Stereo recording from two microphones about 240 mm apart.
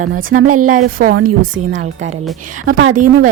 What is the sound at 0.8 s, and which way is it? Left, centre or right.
Speech, right.